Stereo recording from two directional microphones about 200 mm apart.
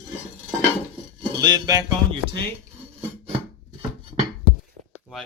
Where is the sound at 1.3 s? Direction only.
20° right (ahead or behind).